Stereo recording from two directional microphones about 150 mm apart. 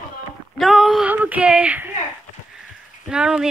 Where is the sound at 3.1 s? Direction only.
5° right (ahead or behind).